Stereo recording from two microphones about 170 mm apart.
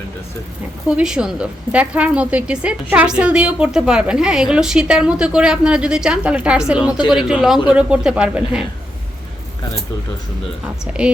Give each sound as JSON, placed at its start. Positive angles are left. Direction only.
{"t": 0.9, "sound": "a woman's voice", "side_deg": -5}